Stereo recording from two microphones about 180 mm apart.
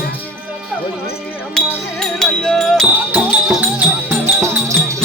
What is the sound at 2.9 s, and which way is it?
Music, 10° right (ahead or behind).